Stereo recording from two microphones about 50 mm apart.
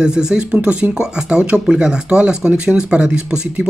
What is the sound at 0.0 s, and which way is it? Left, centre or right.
Speech, centre.